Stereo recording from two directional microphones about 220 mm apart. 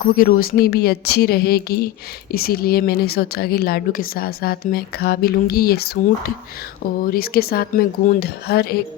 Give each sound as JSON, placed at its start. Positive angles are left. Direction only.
{"t": 0.2, "sound": "a woman's voice", "side_deg": 40}